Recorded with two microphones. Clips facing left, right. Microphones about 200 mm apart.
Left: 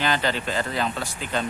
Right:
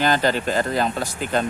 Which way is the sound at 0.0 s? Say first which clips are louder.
Right 5 dB; 45° right (ahead or behind).